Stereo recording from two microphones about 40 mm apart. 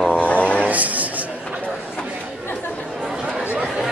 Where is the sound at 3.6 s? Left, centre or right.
Centre.